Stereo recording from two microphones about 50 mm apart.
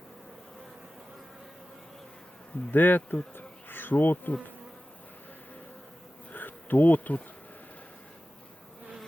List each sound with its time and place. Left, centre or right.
2.7 s speech: left
3.3 s bee: left
6.3 s bee: left